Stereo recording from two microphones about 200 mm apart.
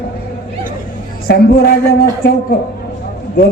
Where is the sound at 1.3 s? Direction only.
55° left (ahead or behind).